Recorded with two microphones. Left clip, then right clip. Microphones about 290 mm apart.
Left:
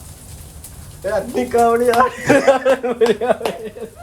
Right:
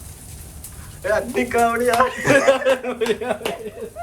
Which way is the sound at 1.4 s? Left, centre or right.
Centre.